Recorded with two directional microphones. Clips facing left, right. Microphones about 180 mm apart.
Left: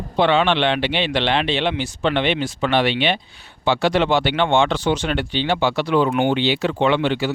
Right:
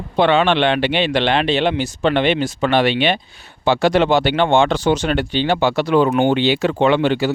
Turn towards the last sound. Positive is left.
turn(degrees=-45)  # may be behind; listen again after turning